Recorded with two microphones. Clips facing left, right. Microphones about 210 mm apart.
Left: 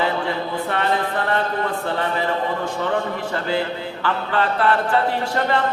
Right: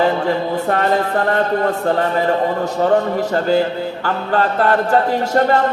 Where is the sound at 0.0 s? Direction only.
45° right (ahead or behind).